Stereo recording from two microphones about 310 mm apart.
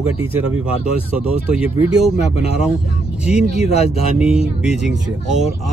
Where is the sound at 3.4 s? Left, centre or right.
Left.